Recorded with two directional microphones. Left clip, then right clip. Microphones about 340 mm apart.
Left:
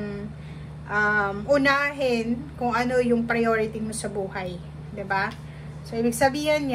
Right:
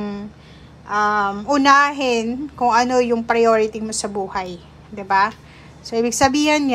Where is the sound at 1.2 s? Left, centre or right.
Centre.